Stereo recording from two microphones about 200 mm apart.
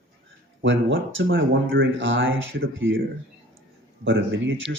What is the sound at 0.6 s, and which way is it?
Speech, 70° right (ahead or behind).